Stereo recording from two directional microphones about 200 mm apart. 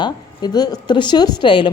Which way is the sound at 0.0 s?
20° left (ahead or behind).